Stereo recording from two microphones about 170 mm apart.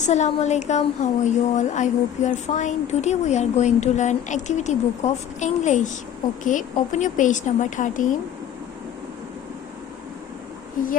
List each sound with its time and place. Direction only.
0.0 s a woman's voice: 45° left (ahead or behind)